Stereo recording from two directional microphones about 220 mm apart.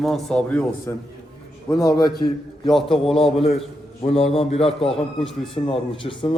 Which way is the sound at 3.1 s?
25° left (ahead or behind).